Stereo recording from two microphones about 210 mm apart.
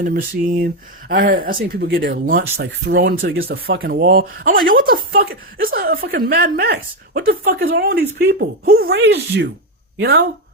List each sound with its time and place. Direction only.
0.0 s speech: 40° right (ahead or behind)